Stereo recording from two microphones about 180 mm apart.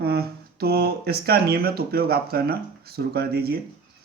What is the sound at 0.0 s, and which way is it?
Speech, 60° right (ahead or behind).